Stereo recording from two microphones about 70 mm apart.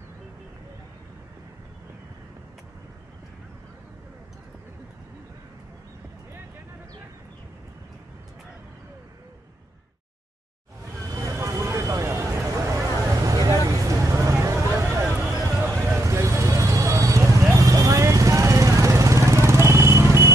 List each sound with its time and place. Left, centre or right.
11.1 s vehicle: right
12.8 s vehicle: right